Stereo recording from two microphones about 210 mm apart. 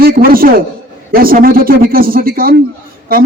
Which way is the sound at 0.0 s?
45° right (ahead or behind).